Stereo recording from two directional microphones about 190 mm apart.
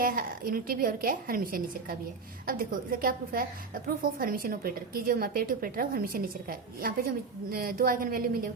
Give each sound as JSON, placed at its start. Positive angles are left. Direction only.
{"t": 0.0, "sound": "a woman's voice", "side_deg": -45}